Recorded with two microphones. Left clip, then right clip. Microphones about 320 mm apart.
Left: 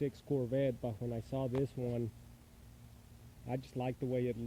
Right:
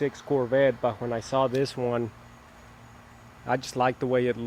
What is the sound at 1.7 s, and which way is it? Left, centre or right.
Speech, right.